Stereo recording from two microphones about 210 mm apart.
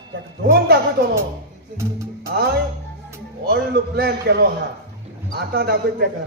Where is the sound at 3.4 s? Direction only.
45° right (ahead or behind).